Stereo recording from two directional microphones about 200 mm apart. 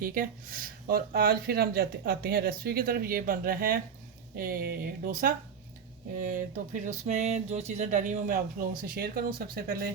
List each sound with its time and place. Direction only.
0.0 s speech: 45° right (ahead or behind)